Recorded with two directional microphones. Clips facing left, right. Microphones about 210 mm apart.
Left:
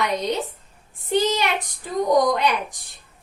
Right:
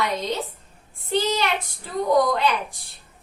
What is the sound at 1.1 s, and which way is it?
A woman's voice, 15° left (ahead or behind).